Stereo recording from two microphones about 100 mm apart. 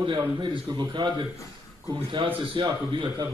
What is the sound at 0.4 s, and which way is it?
Speech, 50° right (ahead or behind).